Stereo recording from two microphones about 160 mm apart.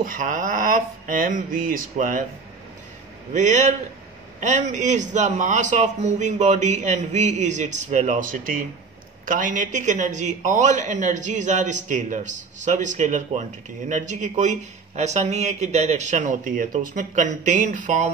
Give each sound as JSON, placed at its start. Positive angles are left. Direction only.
{"t": 0.0, "sound": "speech", "side_deg": -55}
{"t": 3.3, "sound": "a man's voice", "side_deg": -50}